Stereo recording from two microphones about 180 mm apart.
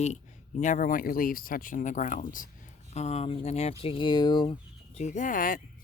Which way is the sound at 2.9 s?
35° left (ahead or behind).